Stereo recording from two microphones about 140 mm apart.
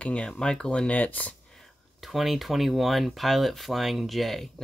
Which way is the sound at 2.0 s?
Centre (ahead or behind).